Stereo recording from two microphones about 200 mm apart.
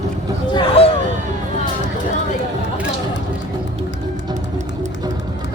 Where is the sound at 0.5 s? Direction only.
30° left (ahead or behind).